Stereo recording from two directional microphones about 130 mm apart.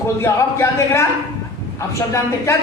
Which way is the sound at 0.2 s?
20° left (ahead or behind).